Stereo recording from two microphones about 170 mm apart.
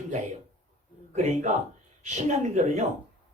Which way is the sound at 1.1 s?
45° right (ahead or behind).